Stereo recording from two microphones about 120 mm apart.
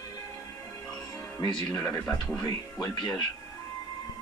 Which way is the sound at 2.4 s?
30° left (ahead or behind).